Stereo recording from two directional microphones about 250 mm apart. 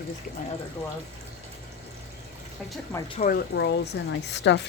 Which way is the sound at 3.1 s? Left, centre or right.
Left.